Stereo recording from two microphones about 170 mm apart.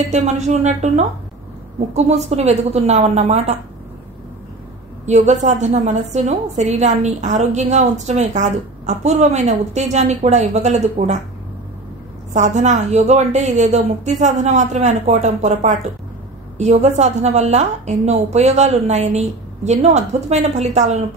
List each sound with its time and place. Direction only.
0.1 s a woman's voice: 45° right (ahead or behind)
5.0 s a woman's voice: 45° right (ahead or behind)
12.4 s a woman's voice: 45° right (ahead or behind)